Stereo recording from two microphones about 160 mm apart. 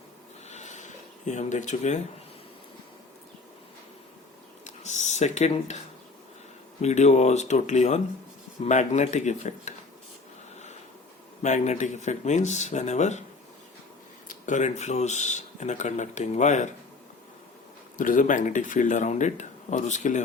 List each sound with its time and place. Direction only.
0.4 s a sound: 45° left (ahead or behind)
4.6 s a sound: 45° left (ahead or behind)
6.8 s speech: 45° left (ahead or behind)
11.4 s speech: 45° left (ahead or behind)
14.3 s speech: 50° left (ahead or behind)
17.9 s speech: 55° left (ahead or behind)